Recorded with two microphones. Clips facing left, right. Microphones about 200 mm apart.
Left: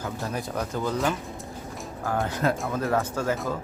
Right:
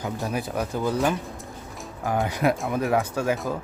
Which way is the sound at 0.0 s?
15° right (ahead or behind).